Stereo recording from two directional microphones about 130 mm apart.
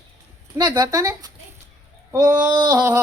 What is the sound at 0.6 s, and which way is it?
A man's voice, 30° right (ahead or behind).